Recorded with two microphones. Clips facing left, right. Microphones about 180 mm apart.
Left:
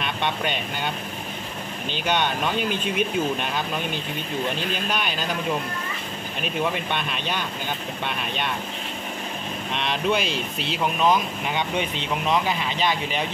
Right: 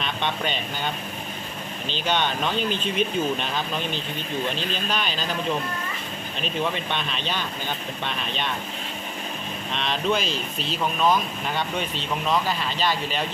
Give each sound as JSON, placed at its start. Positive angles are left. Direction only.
{"t": 0.0, "sound": "speech", "side_deg": 10}
{"t": 2.0, "sound": "speech", "side_deg": 10}
{"t": 6.4, "sound": "speech", "side_deg": 10}
{"t": 9.8, "sound": "speech", "side_deg": 10}